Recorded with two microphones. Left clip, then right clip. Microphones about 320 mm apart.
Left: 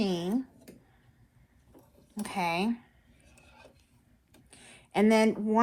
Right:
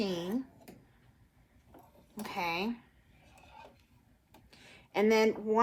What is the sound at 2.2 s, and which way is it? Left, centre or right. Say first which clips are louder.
Speech: left 4 dB; left.